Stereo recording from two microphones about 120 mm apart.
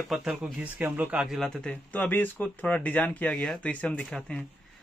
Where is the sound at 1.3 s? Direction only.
5° left (ahead or behind).